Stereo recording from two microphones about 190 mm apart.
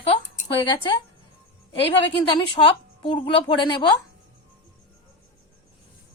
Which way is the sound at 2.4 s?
25° left (ahead or behind).